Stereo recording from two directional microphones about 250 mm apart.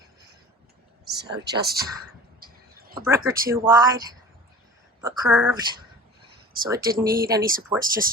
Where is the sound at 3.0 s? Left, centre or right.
Centre.